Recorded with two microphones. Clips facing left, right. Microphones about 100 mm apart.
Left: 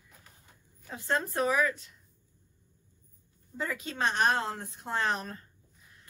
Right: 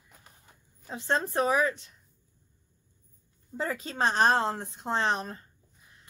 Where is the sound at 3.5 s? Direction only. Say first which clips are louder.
Right 3 dB; 30° right (ahead or behind).